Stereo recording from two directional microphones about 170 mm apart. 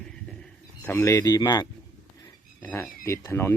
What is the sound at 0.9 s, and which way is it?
Speech, 20° left (ahead or behind).